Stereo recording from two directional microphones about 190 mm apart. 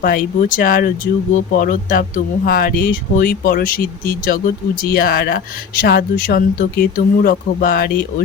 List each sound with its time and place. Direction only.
0.0 s speech: 45° left (ahead or behind)